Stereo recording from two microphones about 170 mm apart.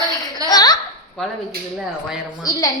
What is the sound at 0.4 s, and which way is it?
Laughter, 20° left (ahead or behind).